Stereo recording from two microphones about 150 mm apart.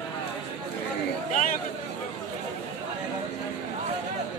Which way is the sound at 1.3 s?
60° left (ahead or behind).